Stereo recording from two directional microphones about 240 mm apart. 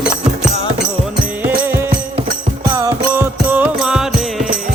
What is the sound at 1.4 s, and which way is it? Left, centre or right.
Music, centre.